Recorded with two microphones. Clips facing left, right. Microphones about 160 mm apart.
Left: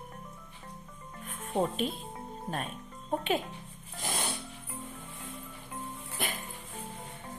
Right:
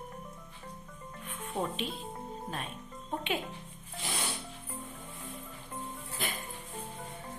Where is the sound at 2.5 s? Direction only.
45° left (ahead or behind).